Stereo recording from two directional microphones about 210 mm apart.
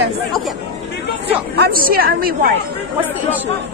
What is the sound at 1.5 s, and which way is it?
Speech, 45° right (ahead or behind).